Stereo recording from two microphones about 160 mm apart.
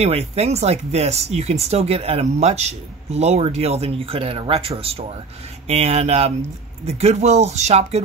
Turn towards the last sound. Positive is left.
turn(degrees=-40)  # may be behind; listen again after turning